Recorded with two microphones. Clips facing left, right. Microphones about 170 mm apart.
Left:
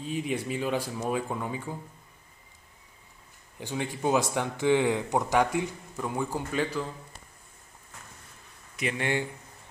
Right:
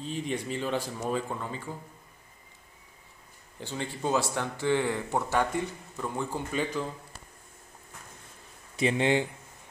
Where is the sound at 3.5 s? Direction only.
15° left (ahead or behind).